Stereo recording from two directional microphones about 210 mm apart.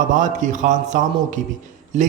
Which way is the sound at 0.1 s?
35° right (ahead or behind).